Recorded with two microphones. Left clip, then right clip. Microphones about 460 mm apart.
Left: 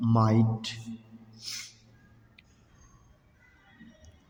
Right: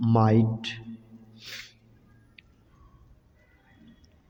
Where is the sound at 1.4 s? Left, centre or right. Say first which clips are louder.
Left 1 dB; right.